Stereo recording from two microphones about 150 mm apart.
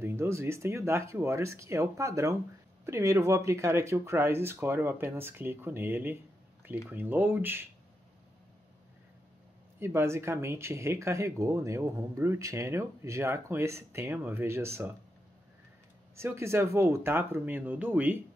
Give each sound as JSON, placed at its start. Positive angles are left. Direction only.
{"t": 0.0, "sound": "speech", "side_deg": -20}
{"t": 9.8, "sound": "speech", "side_deg": -15}
{"t": 16.2, "sound": "speech", "side_deg": -20}